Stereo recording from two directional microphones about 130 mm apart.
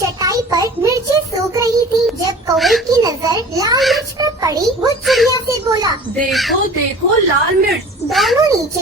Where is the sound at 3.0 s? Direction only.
30° right (ahead or behind).